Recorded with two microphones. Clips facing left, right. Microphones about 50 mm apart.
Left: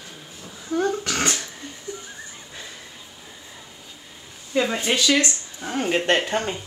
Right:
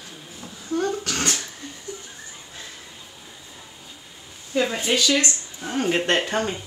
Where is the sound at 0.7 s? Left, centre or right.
Centre.